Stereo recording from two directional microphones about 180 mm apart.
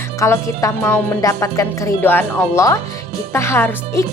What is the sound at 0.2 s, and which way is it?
A woman's voice, 15° left (ahead or behind).